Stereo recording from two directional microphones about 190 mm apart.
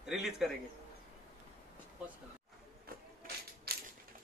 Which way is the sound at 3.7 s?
55° right (ahead or behind).